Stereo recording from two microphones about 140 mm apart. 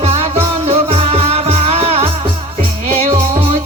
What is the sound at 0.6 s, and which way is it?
Music, 50° right (ahead or behind).